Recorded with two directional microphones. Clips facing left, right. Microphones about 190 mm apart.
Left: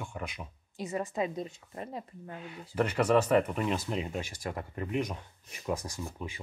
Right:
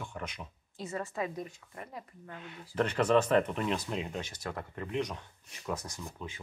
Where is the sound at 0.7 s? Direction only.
15° left (ahead or behind).